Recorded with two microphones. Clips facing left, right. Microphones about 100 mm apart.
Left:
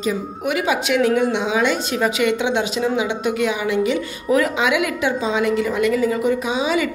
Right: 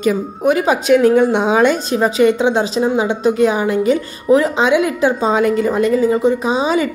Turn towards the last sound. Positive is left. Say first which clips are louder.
# right 4 dB
turn(degrees=-35)  # may be behind; listen again after turning